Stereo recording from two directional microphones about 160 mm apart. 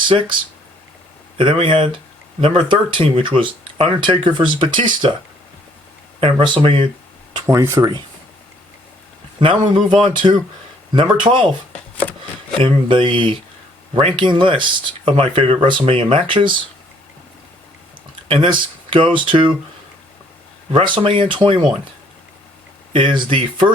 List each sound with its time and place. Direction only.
1.4 s speech: 35° right (ahead or behind)
6.1 s speech: 30° right (ahead or behind)
7.3 s speech: 20° right (ahead or behind)
9.4 s speech: 30° right (ahead or behind)
12.6 s speech: 30° right (ahead or behind)
18.3 s speech: 30° right (ahead or behind)
20.7 s speech: 30° right (ahead or behind)
22.9 s speech: 35° right (ahead or behind)